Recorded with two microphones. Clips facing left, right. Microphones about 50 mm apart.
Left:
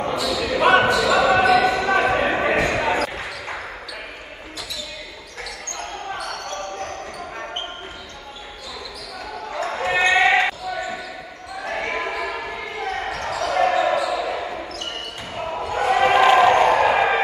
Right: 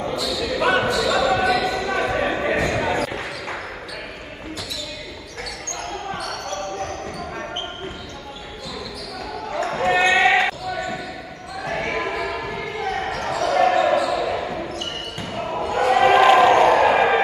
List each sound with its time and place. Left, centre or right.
0.0 s basketball bounce: left
3.1 s basketball bounce: centre
6.8 s basketball bounce: centre
9.7 s basketball bounce: centre
11.8 s a sound: centre
12.9 s basketball bounce: centre